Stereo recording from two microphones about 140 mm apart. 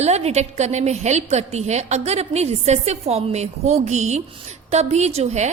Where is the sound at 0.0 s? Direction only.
50° right (ahead or behind).